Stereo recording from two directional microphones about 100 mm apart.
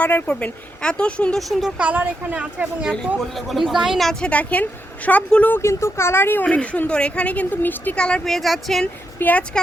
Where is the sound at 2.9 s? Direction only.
Centre (ahead or behind).